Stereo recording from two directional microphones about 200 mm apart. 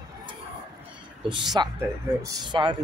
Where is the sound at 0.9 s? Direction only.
25° right (ahead or behind).